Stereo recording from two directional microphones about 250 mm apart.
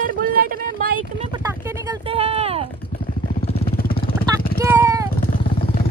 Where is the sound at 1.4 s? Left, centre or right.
Centre.